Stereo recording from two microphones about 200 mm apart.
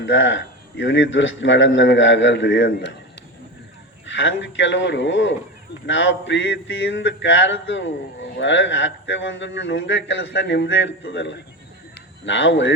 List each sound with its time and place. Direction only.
0.0 s a man's voice: 65° left (ahead or behind)
4.0 s a man's voice: 70° left (ahead or behind)